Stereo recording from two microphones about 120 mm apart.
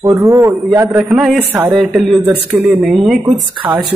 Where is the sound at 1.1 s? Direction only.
5° right (ahead or behind).